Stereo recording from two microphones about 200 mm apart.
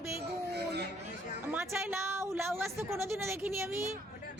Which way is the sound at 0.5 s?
55° right (ahead or behind).